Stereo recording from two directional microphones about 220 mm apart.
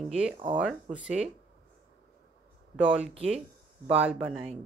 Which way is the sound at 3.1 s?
30° right (ahead or behind).